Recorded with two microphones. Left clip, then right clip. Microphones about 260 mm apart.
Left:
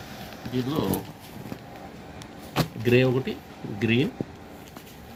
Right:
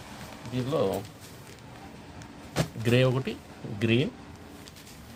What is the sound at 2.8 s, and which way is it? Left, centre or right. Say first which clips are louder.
Speech: left 3 dB; right.